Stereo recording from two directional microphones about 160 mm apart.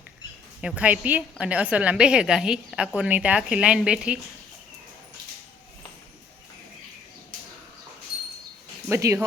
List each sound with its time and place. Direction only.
0.6 s a woman's voice: 10° right (ahead or behind)
8.9 s a woman's voice: 15° right (ahead or behind)